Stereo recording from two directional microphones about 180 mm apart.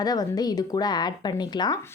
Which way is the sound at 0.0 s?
20° left (ahead or behind).